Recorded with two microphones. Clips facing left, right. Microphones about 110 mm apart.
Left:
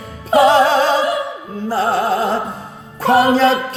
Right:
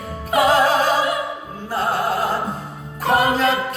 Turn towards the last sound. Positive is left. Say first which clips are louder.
# left 5 dB
turn(degrees=30)  # may be behind; listen again after turning